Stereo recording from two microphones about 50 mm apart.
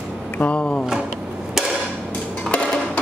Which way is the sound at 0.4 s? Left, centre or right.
Left.